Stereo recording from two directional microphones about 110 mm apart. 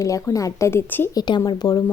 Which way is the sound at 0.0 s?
30° left (ahead or behind).